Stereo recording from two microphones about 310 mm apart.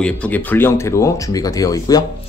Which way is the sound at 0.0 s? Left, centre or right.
Centre.